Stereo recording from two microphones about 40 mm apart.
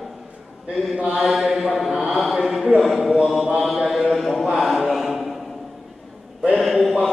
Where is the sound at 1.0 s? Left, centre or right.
Centre.